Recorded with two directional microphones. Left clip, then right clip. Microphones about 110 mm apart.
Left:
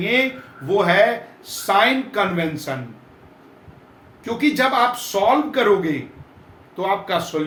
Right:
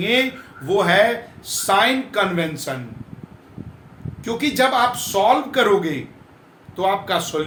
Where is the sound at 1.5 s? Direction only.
45° right (ahead or behind).